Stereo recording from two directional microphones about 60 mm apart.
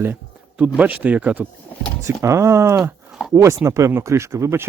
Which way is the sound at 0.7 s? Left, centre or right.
Right.